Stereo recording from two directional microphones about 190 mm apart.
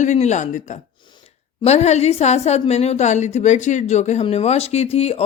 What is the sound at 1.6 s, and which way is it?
A woman's voice, 35° left (ahead or behind).